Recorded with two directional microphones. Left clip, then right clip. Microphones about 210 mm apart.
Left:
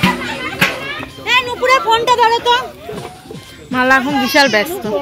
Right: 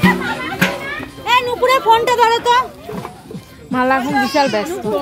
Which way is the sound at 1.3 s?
45° right (ahead or behind).